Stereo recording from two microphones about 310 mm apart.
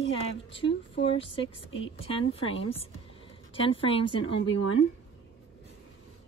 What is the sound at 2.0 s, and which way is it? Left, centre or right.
A woman's voice, centre.